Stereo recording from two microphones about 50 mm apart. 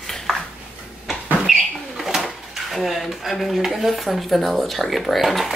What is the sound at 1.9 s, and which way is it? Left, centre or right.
Speech, centre.